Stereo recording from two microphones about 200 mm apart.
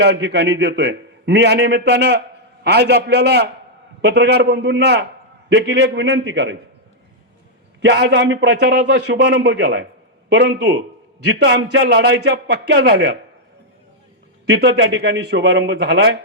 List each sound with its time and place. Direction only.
0.0 s a man's voice: 55° right (ahead or behind)
7.8 s a man's voice: 60° right (ahead or behind)
14.4 s a man's voice: 55° right (ahead or behind)